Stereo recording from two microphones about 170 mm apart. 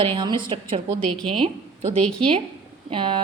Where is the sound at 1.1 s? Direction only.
5° left (ahead or behind).